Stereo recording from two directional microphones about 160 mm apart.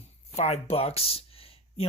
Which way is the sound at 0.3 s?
40° left (ahead or behind).